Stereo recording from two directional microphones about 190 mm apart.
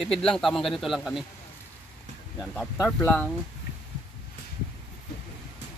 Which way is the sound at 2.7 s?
10° left (ahead or behind).